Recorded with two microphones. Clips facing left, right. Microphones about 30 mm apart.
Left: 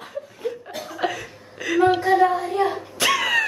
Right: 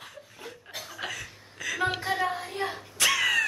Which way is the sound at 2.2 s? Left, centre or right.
Centre.